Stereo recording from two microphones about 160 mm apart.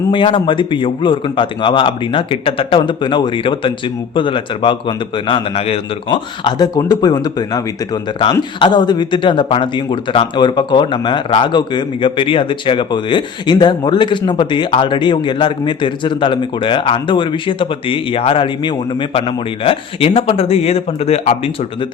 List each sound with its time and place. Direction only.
0.1 s a man's voice: 35° left (ahead or behind)